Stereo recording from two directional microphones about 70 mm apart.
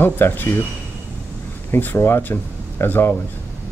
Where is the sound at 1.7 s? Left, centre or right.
Left.